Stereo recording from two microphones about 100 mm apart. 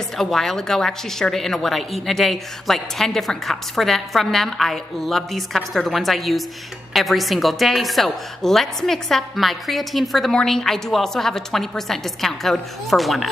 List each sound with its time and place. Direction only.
0.2 s a woman's voice: 5° left (ahead or behind)